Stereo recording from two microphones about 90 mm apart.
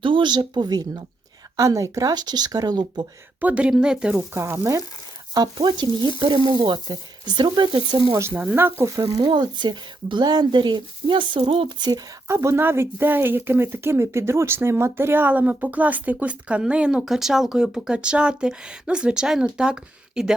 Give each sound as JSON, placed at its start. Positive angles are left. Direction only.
{"t": 0.0, "sound": "speech", "side_deg": -65}
{"t": 1.5, "sound": "frying", "side_deg": -40}
{"t": 3.4, "sound": "speech", "side_deg": -15}
{"t": 4.4, "sound": "frying", "side_deg": -30}
{"t": 5.3, "sound": "frying", "side_deg": -50}
{"t": 8.3, "sound": "speech", "side_deg": -15}
{"t": 9.0, "sound": "speech", "side_deg": -55}
{"t": 12.3, "sound": "speech", "side_deg": -30}